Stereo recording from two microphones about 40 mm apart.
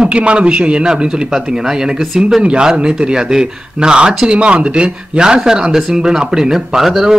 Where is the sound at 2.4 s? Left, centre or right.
Right.